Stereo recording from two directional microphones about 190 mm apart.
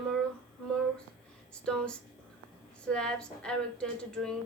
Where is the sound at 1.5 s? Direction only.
5° left (ahead or behind).